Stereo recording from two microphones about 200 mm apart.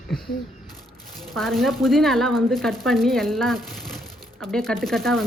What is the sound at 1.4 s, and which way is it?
A woman's voice, centre (ahead or behind).